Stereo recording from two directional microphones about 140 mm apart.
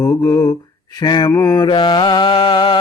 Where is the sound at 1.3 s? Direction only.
25° left (ahead or behind).